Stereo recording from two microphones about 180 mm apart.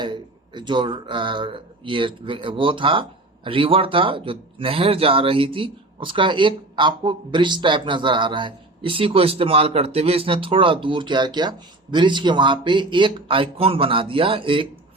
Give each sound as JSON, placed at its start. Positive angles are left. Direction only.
{"t": 0.0, "sound": "speech", "side_deg": -25}